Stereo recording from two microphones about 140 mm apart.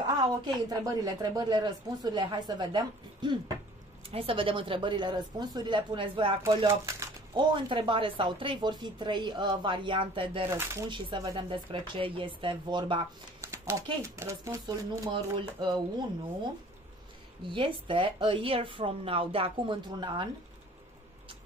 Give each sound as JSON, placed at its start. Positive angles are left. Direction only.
{"t": 0.2, "sound": "speech", "side_deg": -25}
{"t": 6.4, "sound": "speech", "side_deg": -25}
{"t": 7.3, "sound": "speech", "side_deg": -35}
{"t": 10.5, "sound": "speech", "side_deg": -20}
{"t": 10.9, "sound": "speech", "side_deg": -35}
{"t": 13.4, "sound": "a sound", "side_deg": -20}
{"t": 14.0, "sound": "speech", "side_deg": -20}
{"t": 15.0, "sound": "speech", "side_deg": -35}
{"t": 17.5, "sound": "speech", "side_deg": -35}